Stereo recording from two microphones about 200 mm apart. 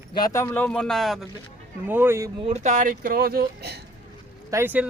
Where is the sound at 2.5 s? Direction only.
35° right (ahead or behind).